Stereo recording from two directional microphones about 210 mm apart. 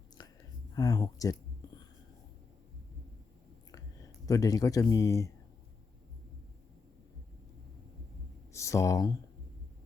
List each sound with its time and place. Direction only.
0.2 s whispering: 20° left (ahead or behind)
0.7 s speech: 15° left (ahead or behind)
4.3 s speech: 15° left (ahead or behind)
8.5 s speech: 15° left (ahead or behind)